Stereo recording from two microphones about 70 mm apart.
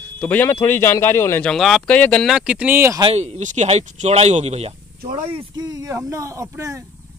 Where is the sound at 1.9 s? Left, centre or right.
Centre.